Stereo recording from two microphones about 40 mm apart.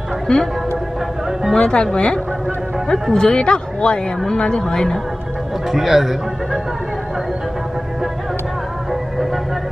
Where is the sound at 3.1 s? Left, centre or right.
Left.